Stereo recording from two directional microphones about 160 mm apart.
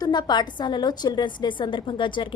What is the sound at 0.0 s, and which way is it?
A woman's voice, 25° left (ahead or behind).